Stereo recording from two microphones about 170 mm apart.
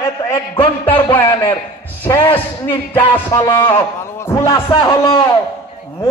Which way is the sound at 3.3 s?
25° left (ahead or behind).